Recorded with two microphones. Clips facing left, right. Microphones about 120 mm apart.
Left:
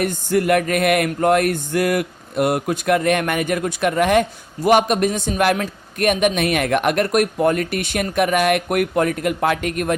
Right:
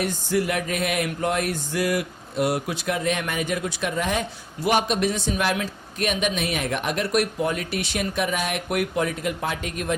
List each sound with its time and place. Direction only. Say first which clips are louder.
0.0 s speech: left 5 dB; 55° left (ahead or behind)